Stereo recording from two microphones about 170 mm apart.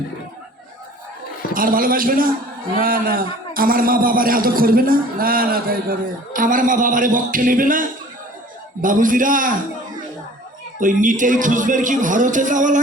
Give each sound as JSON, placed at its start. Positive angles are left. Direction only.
{"t": 1.5, "sound": "a man's voice", "side_deg": -55}
{"t": 10.8, "sound": "speech", "side_deg": -50}